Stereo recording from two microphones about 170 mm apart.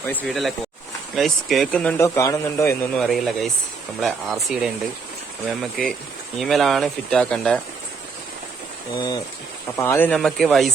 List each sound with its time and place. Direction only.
0.3 s speech: centre (ahead or behind); by 2.9 s 15° left (ahead or behind)
2.9 s speech: centre (ahead or behind)
9.0 s speech: 25° left (ahead or behind); by 10.7 s centre (ahead or behind)